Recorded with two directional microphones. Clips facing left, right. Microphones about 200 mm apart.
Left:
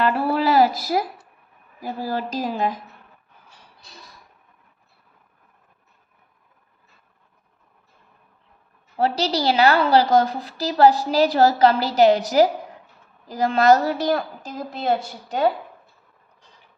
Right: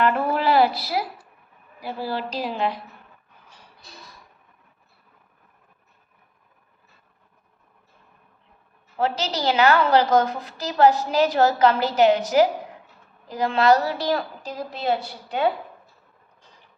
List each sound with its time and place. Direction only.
0.0 s a sound: 35° left (ahead or behind)
1.8 s a woman's voice: 45° left (ahead or behind)
9.0 s a woman's voice: 35° left (ahead or behind)